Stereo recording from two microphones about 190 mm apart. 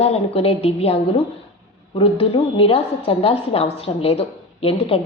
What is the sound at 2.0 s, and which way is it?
Speech, 30° left (ahead or behind).